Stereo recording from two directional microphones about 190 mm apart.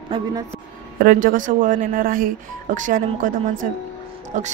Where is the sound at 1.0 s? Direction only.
45° right (ahead or behind).